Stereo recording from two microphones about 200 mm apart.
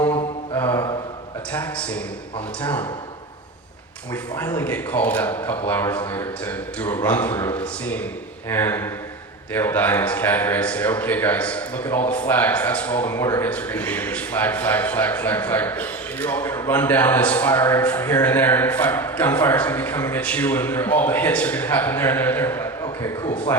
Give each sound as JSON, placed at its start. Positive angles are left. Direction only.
{"t": 0.1, "sound": "mantra", "side_deg": 25}
{"t": 0.6, "sound": "mantra", "side_deg": 10}
{"t": 1.5, "sound": "a man's voice", "side_deg": 5}
{"t": 4.1, "sound": "a man's voice", "side_deg": 10}